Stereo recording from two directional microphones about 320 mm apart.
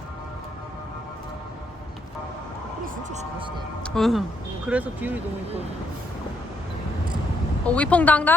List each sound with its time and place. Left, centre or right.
2.8 s speech: right
3.8 s speech: centre
7.6 s speech: centre